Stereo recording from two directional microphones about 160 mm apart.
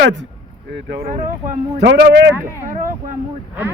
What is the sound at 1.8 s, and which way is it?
Speech, 90° right.